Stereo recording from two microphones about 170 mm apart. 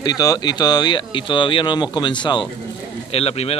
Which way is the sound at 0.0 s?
20° left (ahead or behind).